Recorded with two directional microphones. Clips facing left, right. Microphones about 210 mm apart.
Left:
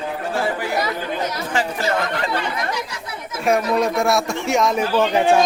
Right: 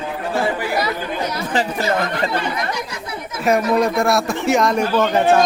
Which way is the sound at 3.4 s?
Centre (ahead or behind).